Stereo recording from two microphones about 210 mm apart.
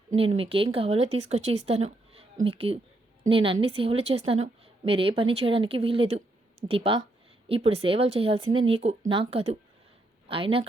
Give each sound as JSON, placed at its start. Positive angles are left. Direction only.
{"t": 0.2, "sound": "a woman's voice", "side_deg": -25}